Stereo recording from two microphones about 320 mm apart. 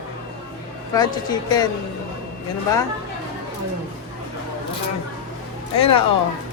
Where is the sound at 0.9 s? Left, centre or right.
Centre.